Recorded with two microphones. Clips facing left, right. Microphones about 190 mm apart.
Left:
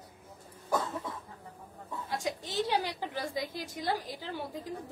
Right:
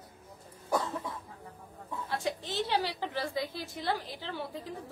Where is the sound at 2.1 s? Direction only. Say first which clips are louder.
Right 1 dB; 10° left (ahead or behind).